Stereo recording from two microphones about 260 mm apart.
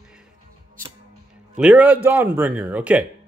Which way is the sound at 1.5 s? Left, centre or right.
Centre.